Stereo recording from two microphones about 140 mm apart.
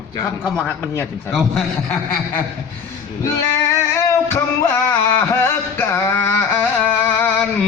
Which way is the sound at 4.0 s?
20° left (ahead or behind).